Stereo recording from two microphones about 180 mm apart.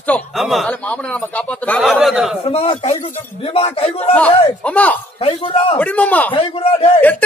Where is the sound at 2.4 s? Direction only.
35° left (ahead or behind).